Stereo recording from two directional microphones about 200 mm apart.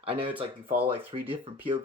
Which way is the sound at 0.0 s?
25° right (ahead or behind).